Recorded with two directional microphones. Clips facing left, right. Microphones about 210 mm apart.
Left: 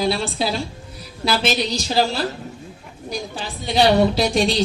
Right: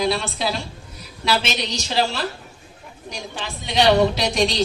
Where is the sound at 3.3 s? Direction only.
35° left (ahead or behind).